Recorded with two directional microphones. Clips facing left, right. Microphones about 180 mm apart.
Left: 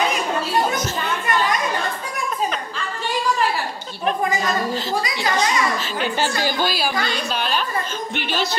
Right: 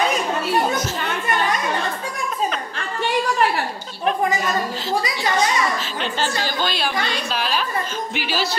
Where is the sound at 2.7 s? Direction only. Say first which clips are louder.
Right 3 dB; 60° right (ahead or behind).